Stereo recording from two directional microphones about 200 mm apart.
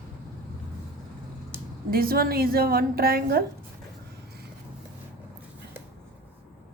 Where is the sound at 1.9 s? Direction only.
50° right (ahead or behind).